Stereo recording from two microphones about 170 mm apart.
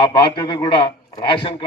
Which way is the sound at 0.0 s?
30° left (ahead or behind).